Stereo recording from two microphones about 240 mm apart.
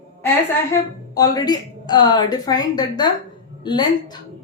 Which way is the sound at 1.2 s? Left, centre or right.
Centre.